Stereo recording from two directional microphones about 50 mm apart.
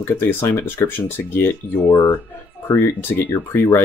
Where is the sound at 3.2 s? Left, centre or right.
Left.